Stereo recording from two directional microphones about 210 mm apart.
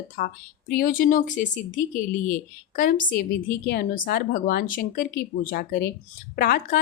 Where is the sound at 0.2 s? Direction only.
40° left (ahead or behind).